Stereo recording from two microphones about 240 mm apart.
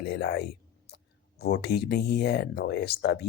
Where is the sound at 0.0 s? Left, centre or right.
Left.